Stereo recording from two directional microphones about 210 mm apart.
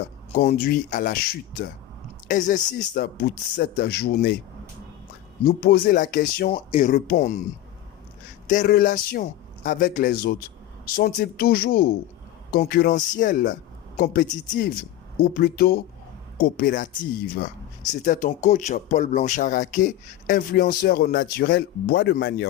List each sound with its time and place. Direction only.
0.3 s speech: 45° left (ahead or behind)
5.5 s speech: 45° left (ahead or behind)
6.5 s speech: 30° left (ahead or behind)
8.4 s speech: 40° left (ahead or behind)